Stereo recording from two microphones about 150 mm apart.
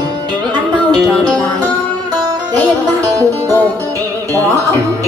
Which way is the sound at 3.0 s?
25° right (ahead or behind).